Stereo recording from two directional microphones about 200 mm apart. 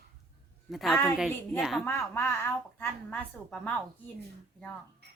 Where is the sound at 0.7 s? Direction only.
Centre (ahead or behind).